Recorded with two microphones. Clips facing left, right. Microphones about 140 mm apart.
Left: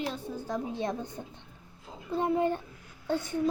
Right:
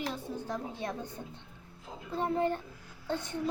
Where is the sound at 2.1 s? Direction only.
15° left (ahead or behind).